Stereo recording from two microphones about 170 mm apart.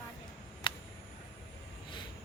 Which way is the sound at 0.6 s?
30° left (ahead or behind).